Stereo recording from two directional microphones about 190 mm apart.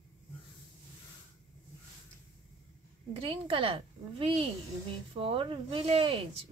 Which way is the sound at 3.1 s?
30° right (ahead or behind).